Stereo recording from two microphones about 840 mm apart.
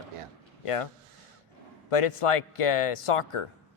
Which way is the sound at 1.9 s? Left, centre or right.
Left.